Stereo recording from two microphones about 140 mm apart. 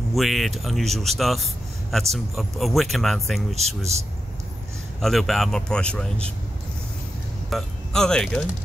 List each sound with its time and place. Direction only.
0.1 s a man's voice: centre (ahead or behind)
3.5 s speech: 50° right (ahead or behind)
5.0 s speech: centre (ahead or behind)
7.4 s speech: centre (ahead or behind)